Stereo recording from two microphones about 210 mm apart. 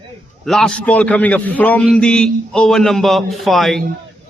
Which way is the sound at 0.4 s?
Centre (ahead or behind).